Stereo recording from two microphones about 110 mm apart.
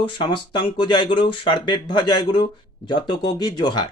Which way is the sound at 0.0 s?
50° left (ahead or behind).